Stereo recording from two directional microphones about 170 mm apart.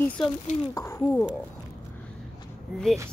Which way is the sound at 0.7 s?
15° left (ahead or behind).